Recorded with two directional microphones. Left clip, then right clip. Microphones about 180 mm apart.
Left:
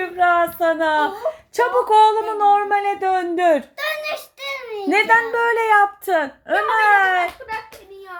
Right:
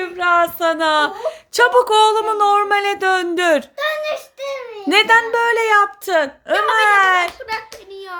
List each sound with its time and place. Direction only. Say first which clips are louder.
0.0 s speech: right 1 dB; 15° right (ahead or behind)
3.8 s a child's voice: right 4 dB; 15° right (ahead or behind)